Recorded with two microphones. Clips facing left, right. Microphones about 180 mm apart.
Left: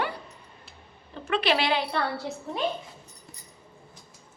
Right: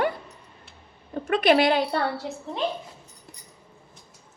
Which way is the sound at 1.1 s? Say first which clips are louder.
Right 6 dB; 50° right (ahead or behind).